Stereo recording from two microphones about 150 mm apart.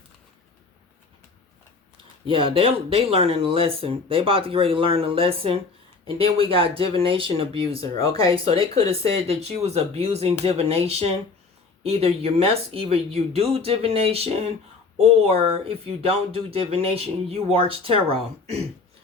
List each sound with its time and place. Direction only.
2.2 s speech: 35° right (ahead or behind)